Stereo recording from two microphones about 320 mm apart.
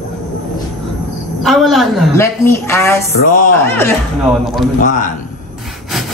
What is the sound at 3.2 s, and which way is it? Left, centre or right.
Speech, left.